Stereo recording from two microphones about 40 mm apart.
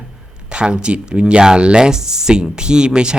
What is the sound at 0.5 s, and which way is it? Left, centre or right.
Speech, right.